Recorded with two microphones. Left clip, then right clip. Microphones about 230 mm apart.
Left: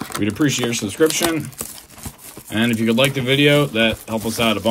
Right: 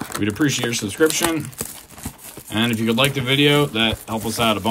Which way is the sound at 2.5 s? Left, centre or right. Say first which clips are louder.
Left 2 dB; centre.